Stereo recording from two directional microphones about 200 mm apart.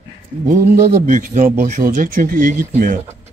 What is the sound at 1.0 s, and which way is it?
Speech, 40° right (ahead or behind).